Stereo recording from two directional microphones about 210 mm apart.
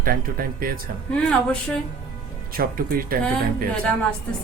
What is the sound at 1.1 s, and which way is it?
Speech, 5° left (ahead or behind).